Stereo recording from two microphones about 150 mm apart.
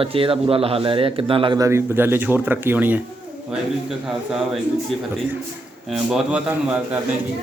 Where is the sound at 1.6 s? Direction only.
20° right (ahead or behind).